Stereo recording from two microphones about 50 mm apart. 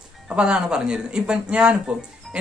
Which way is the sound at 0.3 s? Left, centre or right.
Centre.